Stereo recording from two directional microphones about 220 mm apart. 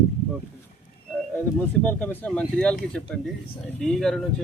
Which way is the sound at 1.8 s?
5° left (ahead or behind).